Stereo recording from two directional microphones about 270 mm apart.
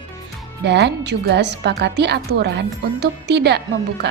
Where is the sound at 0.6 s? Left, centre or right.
Right.